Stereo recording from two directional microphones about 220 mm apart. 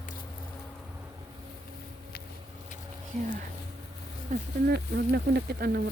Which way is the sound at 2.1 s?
45° left (ahead or behind).